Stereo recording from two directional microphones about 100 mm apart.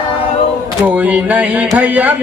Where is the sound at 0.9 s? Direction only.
15° right (ahead or behind).